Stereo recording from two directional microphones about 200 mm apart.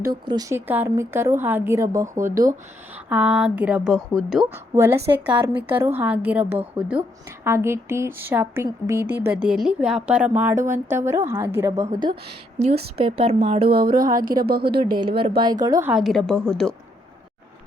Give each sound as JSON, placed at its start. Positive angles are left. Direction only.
{"t": 0.0, "sound": "a woman's voice", "side_deg": -20}
{"t": 12.5, "sound": "speech", "side_deg": -30}
{"t": 13.7, "sound": "speech", "side_deg": -50}
{"t": 15.4, "sound": "speech", "side_deg": -20}
{"t": 15.9, "sound": "a woman's voice", "side_deg": 0}